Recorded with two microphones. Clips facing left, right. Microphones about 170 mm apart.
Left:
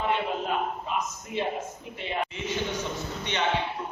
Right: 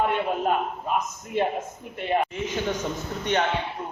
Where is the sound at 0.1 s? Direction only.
50° right (ahead or behind).